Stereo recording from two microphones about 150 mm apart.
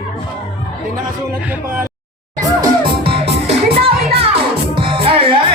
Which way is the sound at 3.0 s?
40° right (ahead or behind).